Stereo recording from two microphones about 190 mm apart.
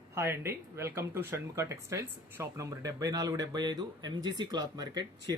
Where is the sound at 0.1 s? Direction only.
15° right (ahead or behind).